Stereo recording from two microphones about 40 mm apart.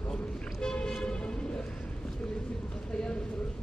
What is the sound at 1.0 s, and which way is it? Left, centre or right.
Vehicle, left.